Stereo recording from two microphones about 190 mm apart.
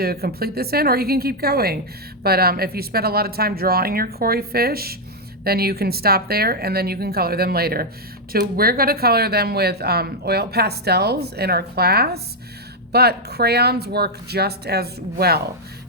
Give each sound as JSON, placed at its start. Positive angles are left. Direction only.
{"t": 0.0, "sound": "speech", "side_deg": -55}